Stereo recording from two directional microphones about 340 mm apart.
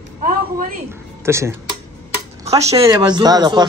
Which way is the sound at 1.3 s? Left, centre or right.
Centre.